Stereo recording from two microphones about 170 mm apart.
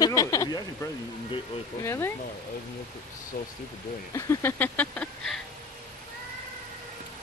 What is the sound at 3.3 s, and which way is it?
Speech, 65° left (ahead or behind).